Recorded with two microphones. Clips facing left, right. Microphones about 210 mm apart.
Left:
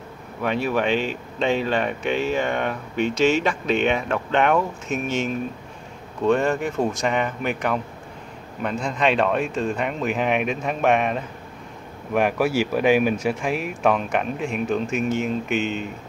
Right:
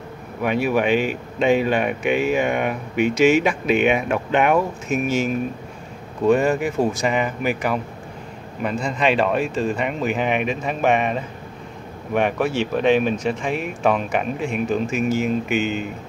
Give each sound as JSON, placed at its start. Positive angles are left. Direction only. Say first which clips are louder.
{"t": 0.4, "sound": "speech", "louder": "right 3 dB", "side_deg": -10}